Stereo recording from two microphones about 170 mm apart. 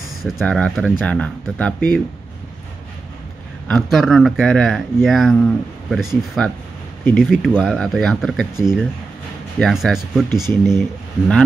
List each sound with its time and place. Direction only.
0.2 s speech: centre (ahead or behind)
3.6 s speech: centre (ahead or behind)